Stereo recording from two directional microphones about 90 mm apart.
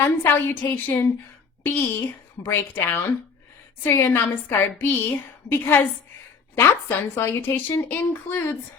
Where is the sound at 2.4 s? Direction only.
30° left (ahead or behind).